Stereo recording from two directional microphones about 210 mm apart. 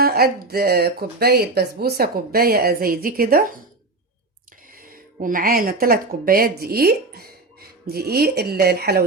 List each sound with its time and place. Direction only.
0.0 s speech: 45° right (ahead or behind)
4.8 s speech: 40° right (ahead or behind)